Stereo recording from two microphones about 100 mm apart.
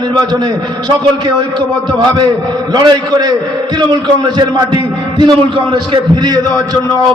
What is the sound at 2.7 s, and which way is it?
A man's voice, 45° right (ahead or behind).